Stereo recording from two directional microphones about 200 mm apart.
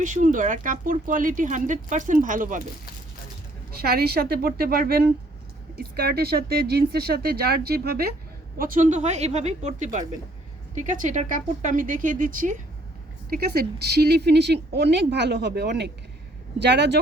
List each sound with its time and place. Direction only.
0.0 s speech: 40° right (ahead or behind)
3.8 s speech: 50° right (ahead or behind)
13.3 s speech: 50° right (ahead or behind)